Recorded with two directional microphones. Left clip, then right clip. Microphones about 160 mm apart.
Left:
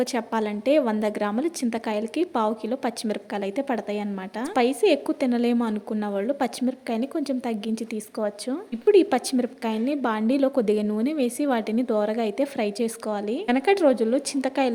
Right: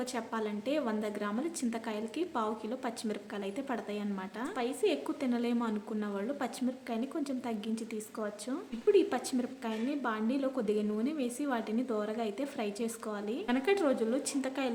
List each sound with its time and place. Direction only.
0.0 s a woman's voice: 45° left (ahead or behind)